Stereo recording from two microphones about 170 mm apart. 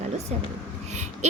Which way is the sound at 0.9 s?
40° right (ahead or behind).